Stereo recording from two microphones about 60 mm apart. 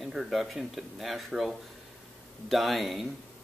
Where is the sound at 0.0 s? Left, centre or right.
Centre.